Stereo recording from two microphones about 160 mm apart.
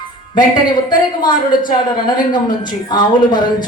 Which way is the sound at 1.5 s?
60° left (ahead or behind).